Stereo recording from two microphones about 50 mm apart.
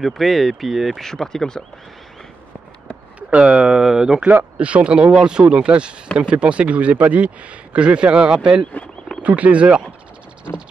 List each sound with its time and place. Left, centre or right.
0.0 s speech: centre
3.2 s speech: right
3.8 s speech: centre
4.6 s speech: right
9.2 s speech: right